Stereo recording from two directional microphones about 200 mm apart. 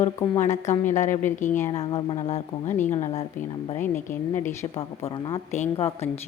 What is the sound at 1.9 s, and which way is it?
Speech, 25° left (ahead or behind).